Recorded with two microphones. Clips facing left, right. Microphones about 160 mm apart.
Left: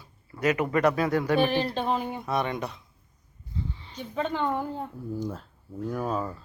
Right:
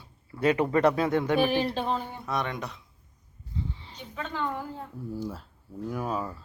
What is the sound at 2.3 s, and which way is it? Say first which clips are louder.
Speech: left 2 dB; 5° left (ahead or behind).